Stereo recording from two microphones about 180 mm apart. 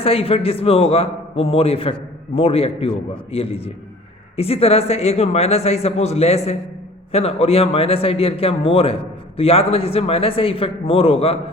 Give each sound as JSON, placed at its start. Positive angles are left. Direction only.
{"t": 0.0, "sound": "a man's voice", "side_deg": 30}